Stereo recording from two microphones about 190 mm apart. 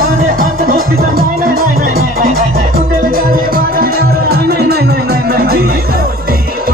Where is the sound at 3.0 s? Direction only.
50° right (ahead or behind).